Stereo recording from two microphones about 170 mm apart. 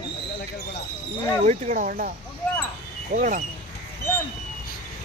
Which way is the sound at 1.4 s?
45° right (ahead or behind).